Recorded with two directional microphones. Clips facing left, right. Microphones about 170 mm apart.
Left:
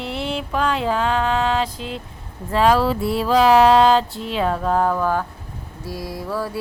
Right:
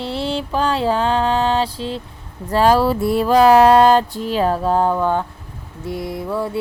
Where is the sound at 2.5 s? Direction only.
40° right (ahead or behind).